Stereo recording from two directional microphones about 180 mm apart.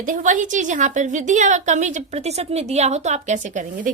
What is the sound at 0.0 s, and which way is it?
A woman's voice, 45° right (ahead or behind).